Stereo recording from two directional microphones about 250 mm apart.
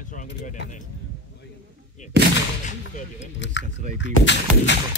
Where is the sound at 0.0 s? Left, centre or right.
Left.